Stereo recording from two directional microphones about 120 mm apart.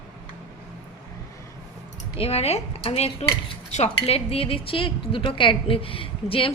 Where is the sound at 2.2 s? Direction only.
60° left (ahead or behind).